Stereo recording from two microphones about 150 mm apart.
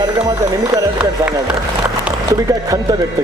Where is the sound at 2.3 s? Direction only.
25° right (ahead or behind).